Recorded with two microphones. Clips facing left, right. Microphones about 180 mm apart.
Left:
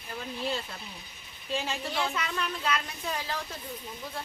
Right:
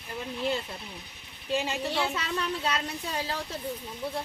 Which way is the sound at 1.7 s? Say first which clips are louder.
Right 2 dB; 10° right (ahead or behind).